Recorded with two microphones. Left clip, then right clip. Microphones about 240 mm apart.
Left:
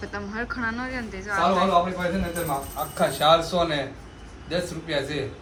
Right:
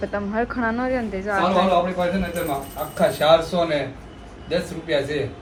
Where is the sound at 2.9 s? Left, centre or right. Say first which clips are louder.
Right 3 dB; centre.